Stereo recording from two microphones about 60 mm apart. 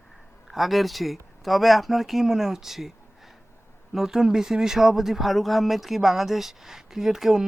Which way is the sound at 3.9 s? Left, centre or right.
Centre.